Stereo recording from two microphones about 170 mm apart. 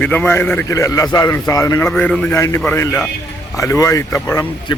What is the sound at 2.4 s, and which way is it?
A man's voice, 15° left (ahead or behind).